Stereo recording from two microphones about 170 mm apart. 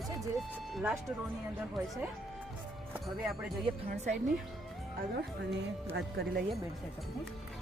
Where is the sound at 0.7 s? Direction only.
Centre (ahead or behind).